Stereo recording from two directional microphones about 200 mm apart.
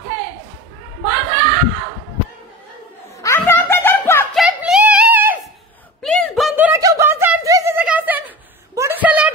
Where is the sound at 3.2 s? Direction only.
10° left (ahead or behind).